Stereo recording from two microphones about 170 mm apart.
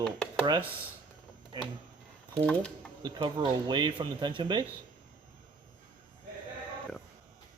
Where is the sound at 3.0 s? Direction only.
30° right (ahead or behind).